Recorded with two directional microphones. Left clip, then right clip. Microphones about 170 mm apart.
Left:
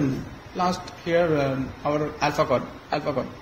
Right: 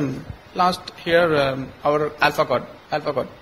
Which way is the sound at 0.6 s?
45° right (ahead or behind).